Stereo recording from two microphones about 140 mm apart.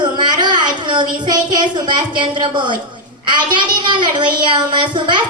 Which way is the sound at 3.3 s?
35° right (ahead or behind).